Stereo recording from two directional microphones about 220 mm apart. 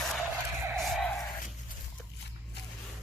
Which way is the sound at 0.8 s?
Centre (ahead or behind).